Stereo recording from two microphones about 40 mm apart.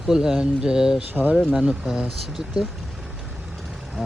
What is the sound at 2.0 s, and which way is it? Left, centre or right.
Speech, centre.